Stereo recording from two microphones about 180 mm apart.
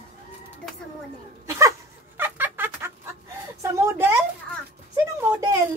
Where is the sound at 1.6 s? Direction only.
15° right (ahead or behind).